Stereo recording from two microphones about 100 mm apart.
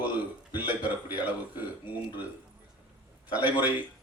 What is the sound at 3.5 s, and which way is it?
Speech, 15° right (ahead or behind).